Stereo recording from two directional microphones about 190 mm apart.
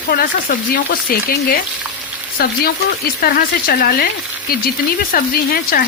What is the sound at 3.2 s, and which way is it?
Speech, 50° left (ahead or behind).